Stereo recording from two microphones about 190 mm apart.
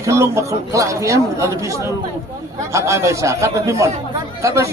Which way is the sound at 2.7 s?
15° right (ahead or behind).